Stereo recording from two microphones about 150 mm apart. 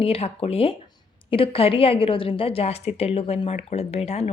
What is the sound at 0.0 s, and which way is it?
A woman's voice, 40° left (ahead or behind).